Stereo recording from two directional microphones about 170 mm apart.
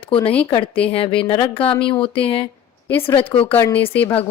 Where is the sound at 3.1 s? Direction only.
35° left (ahead or behind).